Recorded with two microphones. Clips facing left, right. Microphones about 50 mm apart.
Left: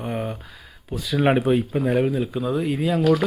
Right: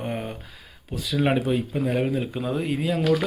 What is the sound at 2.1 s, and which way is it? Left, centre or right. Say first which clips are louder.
Speech: left 3 dB; centre.